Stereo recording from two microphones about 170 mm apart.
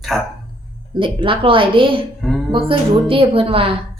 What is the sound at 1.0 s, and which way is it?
A woman's voice, 30° right (ahead or behind).